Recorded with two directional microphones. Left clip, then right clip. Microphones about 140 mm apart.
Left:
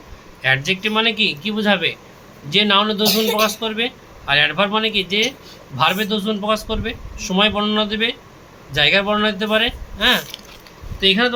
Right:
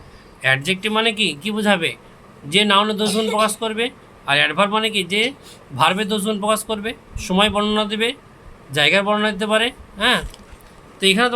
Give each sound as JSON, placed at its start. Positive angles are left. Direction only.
{"t": 0.4, "sound": "a man's voice", "side_deg": -40}
{"t": 11.0, "sound": "speech", "side_deg": -55}